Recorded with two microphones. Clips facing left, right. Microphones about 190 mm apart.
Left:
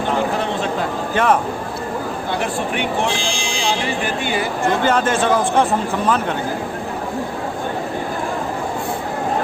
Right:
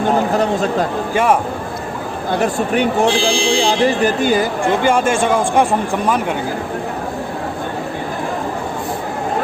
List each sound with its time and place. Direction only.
0.3 s a sound: 40° right (ahead or behind)
1.1 s speech: 10° right (ahead or behind)
2.4 s speech: 40° right (ahead or behind)
4.6 s speech: 15° right (ahead or behind)